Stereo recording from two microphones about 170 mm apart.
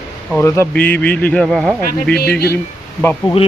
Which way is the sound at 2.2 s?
70° left (ahead or behind).